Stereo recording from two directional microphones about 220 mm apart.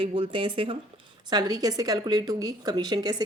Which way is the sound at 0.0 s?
25° right (ahead or behind).